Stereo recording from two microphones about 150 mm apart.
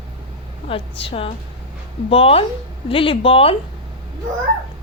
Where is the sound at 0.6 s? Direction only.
40° left (ahead or behind).